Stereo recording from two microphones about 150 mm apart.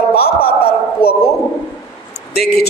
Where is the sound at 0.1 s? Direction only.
90° left.